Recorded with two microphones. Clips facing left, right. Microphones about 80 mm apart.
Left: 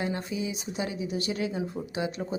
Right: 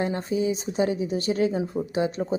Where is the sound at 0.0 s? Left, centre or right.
Right.